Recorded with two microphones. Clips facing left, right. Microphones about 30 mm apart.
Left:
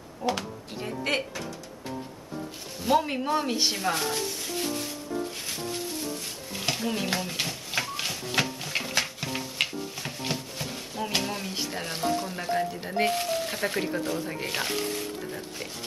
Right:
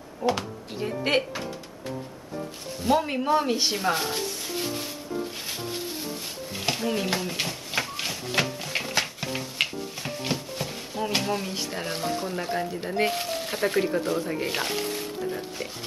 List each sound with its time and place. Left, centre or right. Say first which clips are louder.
0.2 s speech: right 3 dB; centre
2.8 s speech: right 1 dB; centre
6.5 s a sound: right 2 dB; centre